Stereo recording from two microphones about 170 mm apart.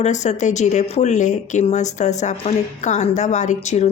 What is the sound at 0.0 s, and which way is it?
Speech, 45° left (ahead or behind).